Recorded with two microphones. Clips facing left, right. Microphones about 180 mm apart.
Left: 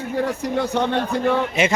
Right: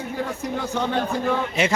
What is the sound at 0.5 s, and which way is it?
Speech, 65° left (ahead or behind).